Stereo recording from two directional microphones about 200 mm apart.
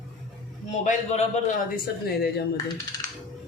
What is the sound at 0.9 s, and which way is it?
A man's voice, 40° left (ahead or behind).